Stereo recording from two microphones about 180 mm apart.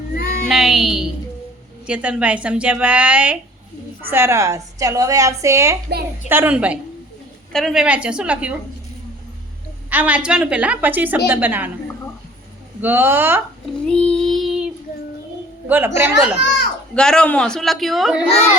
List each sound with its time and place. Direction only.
0.4 s a woman's voice: centre (ahead or behind)
9.9 s a woman's voice: 10° right (ahead or behind)
12.8 s a woman's voice: 10° right (ahead or behind)
13.8 s child singing: 5° left (ahead or behind)
15.6 s a woman's voice: 10° right (ahead or behind)
16.9 s a woman's voice: 5° left (ahead or behind)